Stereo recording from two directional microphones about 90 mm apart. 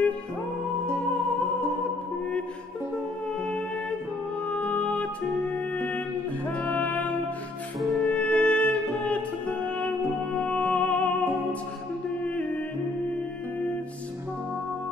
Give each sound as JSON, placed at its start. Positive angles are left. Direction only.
{"t": 4.5, "sound": "music", "side_deg": 15}